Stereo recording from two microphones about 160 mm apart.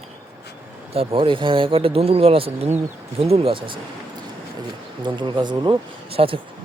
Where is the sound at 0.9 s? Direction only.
30° right (ahead or behind).